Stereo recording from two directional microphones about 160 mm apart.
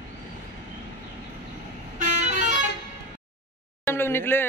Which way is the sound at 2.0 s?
50° right (ahead or behind).